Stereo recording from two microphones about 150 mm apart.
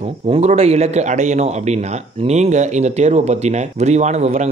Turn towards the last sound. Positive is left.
turn(degrees=-45)  # may be behind; listen again after turning